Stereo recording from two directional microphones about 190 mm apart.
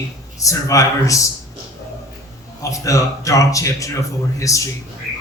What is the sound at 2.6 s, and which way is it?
A man's voice, 15° left (ahead or behind).